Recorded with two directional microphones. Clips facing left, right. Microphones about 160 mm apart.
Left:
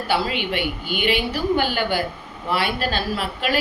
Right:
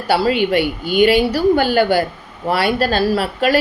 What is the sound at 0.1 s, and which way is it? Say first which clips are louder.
A woman's voice: right 9 dB; 40° right (ahead or behind).